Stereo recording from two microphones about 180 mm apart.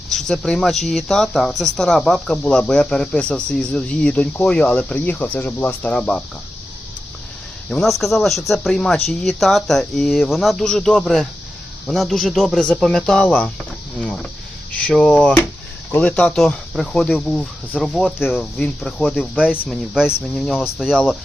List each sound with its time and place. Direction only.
0.1 s speech: centre (ahead or behind)
7.7 s speech: centre (ahead or behind)